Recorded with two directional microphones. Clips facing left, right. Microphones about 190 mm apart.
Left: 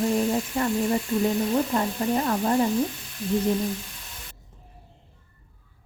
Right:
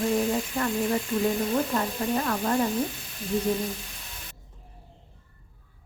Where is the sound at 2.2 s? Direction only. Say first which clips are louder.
Left 4 dB; 20° left (ahead or behind).